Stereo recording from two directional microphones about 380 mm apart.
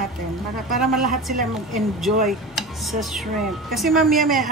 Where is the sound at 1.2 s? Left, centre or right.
Centre.